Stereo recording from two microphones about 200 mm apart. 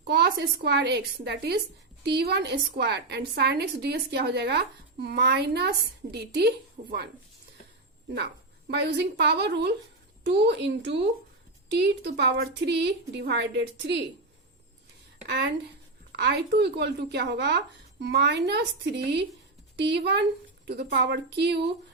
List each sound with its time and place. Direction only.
0.0 s a woman's voice: 55° right (ahead or behind)
6.8 s speech: 35° right (ahead or behind)
8.1 s a woman's voice: 55° right (ahead or behind)
15.3 s a woman's voice: 55° right (ahead or behind)
19.7 s a woman's voice: 55° right (ahead or behind)